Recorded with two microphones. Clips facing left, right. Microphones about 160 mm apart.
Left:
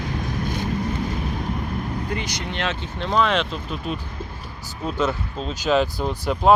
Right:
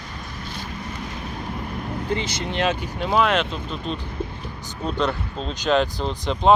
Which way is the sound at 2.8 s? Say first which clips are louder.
Left 3 dB; 5° right (ahead or behind).